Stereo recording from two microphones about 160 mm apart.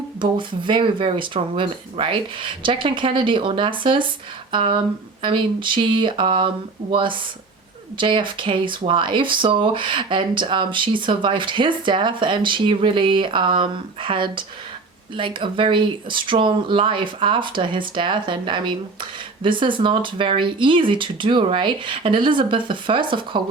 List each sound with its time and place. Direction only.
0.2 s speech: 30° right (ahead or behind)